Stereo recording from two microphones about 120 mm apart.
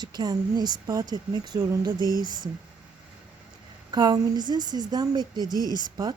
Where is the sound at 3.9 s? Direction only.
35° right (ahead or behind).